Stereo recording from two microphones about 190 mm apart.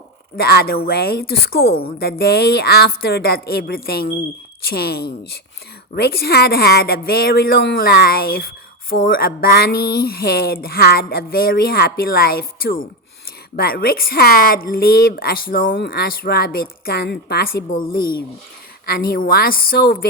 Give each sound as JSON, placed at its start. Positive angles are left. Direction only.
{"t": 0.3, "sound": "a woman's voice", "side_deg": 55}
{"t": 15.6, "sound": "speech", "side_deg": 80}
{"t": 15.9, "sound": "speech", "side_deg": 50}